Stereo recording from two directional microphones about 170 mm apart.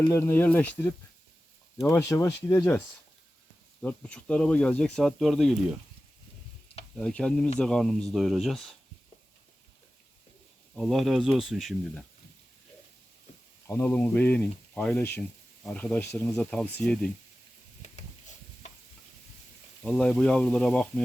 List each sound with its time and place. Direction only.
0.1 s speech: 15° left (ahead or behind)
1.8 s speech: 20° left (ahead or behind); by 5.5 s centre (ahead or behind)
6.9 s speech: 5° left (ahead or behind)
10.8 s speech: centre (ahead or behind)
13.7 s speech: 10° left (ahead or behind)
17.8 s a sound: 40° left (ahead or behind)
19.8 s speech: 5° left (ahead or behind)